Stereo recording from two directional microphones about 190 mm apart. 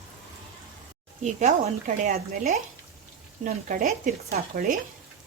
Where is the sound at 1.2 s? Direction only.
40° right (ahead or behind).